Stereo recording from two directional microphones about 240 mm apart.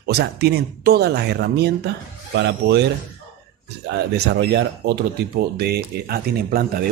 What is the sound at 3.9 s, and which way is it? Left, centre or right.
Speech, right.